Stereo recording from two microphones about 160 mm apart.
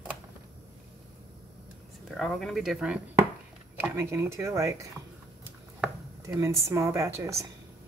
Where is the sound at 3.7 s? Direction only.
15° right (ahead or behind).